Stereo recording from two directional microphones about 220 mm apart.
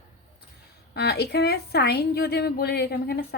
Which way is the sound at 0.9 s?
45° left (ahead or behind).